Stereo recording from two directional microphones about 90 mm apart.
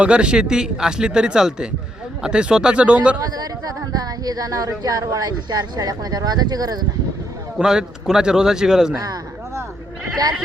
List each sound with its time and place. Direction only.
0.0 s speech: 10° right (ahead or behind)
3.3 s speech: 45° right (ahead or behind)
7.6 s speech: 5° right (ahead or behind)